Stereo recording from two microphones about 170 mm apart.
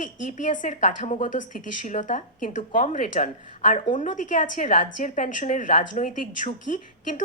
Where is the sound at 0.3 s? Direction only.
50° left (ahead or behind).